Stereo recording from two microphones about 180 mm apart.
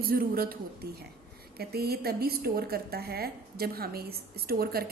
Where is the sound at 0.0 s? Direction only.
55° right (ahead or behind).